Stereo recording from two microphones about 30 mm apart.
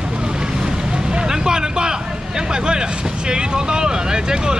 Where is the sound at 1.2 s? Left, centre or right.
Right.